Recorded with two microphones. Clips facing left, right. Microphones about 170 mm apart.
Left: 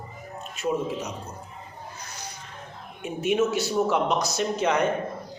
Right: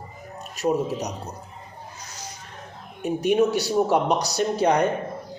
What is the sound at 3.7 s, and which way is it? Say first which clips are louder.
Speech: right 3 dB; 35° right (ahead or behind).